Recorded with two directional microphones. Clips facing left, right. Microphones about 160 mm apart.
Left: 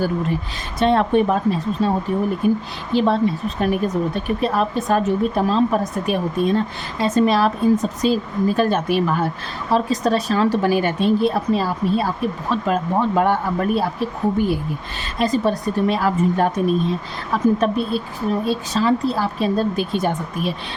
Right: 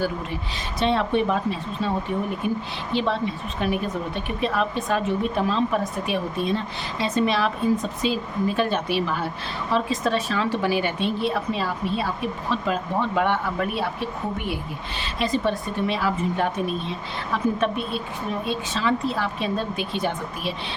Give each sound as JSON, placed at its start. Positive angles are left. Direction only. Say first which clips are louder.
{"t": 0.8, "sound": "a woman's voice", "louder": "left 5 dB", "side_deg": 50}